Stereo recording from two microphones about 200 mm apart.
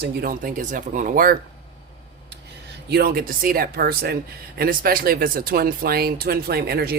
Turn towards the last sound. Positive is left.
turn(degrees=-50)  # may be behind; listen again after turning